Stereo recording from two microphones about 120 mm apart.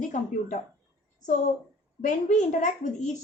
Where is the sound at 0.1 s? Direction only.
90° left.